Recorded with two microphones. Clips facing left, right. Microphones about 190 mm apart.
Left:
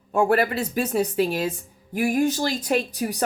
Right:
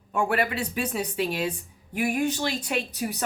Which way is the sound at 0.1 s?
40° left (ahead or behind).